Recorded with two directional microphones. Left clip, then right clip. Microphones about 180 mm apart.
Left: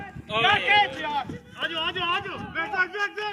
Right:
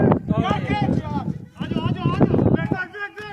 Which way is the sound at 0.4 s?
90° right.